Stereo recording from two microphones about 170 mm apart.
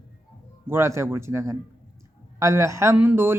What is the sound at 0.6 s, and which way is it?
Speech, 15° right (ahead or behind).